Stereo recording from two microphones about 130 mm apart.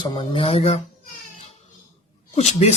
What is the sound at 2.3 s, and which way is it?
Speech, 55° left (ahead or behind).